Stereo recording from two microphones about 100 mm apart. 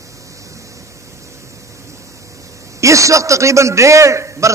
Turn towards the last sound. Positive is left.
turn(degrees=-30)  # may be behind; listen again after turning